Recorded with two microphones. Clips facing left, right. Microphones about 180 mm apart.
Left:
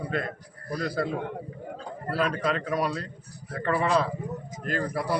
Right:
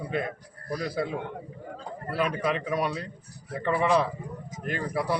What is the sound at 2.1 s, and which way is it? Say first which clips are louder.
Speech: left 1 dB; 15° right (ahead or behind).